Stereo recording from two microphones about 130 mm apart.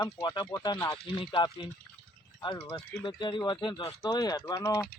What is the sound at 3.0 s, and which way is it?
Speech, 35° left (ahead or behind).